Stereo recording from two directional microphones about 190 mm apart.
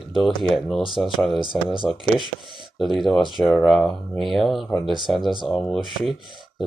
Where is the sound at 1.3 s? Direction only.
25° left (ahead or behind).